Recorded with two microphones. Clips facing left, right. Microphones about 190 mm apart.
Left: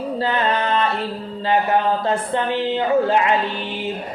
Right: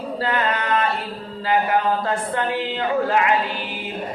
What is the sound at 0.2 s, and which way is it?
Music, 25° left (ahead or behind).